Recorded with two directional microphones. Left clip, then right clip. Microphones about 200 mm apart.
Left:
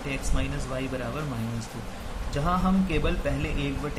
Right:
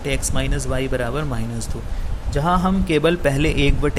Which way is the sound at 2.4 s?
40° right (ahead or behind).